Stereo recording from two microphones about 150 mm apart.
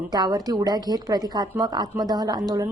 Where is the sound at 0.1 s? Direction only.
25° right (ahead or behind).